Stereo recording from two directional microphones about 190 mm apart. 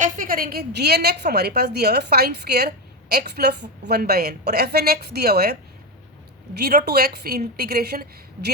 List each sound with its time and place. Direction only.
0.0 s a woman's voice: 45° right (ahead or behind)